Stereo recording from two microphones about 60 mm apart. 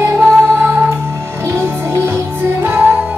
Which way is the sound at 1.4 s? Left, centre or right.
Right.